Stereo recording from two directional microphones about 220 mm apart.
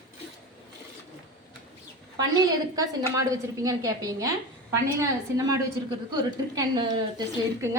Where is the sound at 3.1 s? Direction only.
15° right (ahead or behind).